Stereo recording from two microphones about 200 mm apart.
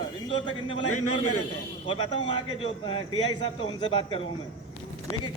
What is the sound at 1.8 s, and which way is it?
A man's voice, 25° left (ahead or behind).